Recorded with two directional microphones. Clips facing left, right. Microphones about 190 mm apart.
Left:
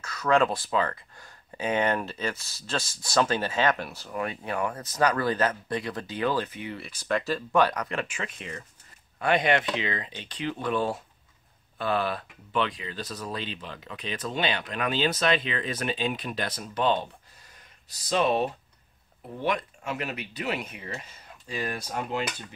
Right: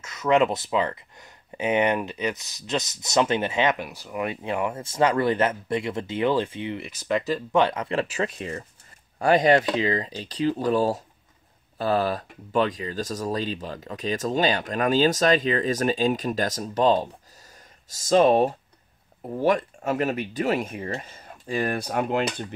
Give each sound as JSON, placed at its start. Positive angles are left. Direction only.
{"t": 0.0, "sound": "speech", "side_deg": -20}